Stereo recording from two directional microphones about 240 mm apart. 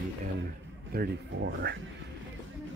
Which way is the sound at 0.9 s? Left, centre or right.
Right.